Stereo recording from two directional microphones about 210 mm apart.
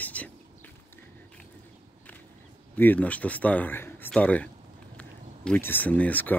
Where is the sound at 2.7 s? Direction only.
10° left (ahead or behind).